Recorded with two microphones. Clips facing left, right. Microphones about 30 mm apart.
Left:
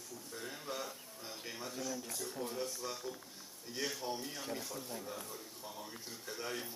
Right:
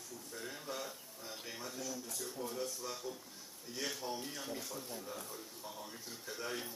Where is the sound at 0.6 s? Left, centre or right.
Centre.